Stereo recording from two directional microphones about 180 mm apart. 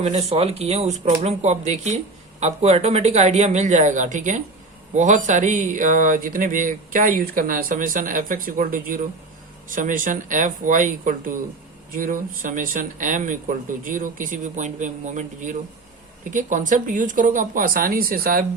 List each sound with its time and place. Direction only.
0.0 s speech: 35° right (ahead or behind); by 18.4 s 55° right (ahead or behind)